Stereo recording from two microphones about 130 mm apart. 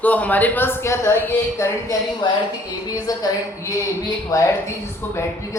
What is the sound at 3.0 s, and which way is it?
A man's voice, 25° left (ahead or behind).